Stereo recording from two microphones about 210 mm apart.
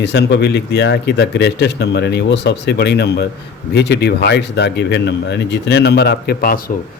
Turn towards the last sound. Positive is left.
turn(degrees=45)  # may be behind; listen again after turning